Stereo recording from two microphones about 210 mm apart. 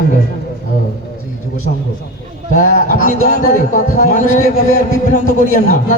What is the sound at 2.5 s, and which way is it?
Speech, 35° left (ahead or behind).